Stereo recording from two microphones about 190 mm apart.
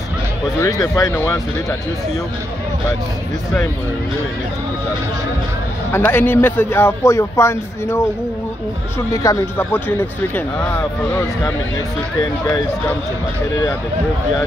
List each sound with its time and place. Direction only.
0.6 s a man's voice: 20° left (ahead or behind)
5.9 s a man's voice: 10° left (ahead or behind)
9.1 s a man's voice: 15° left (ahead or behind)
12.2 s speech: 20° left (ahead or behind)